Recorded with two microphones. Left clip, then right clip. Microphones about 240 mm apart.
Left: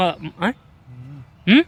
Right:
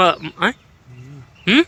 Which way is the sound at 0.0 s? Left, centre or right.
Centre.